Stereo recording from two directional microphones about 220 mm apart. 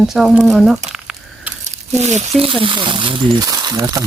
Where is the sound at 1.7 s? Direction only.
30° right (ahead or behind).